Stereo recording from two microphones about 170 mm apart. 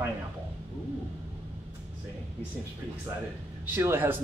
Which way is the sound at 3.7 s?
15° right (ahead or behind).